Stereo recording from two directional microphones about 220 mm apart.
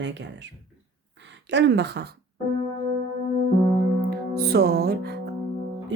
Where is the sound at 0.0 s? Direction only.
55° right (ahead or behind).